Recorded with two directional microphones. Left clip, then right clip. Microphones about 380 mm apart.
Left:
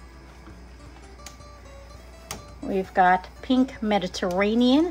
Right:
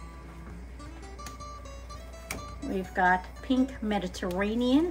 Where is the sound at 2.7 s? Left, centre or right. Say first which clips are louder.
Left 6 dB; centre.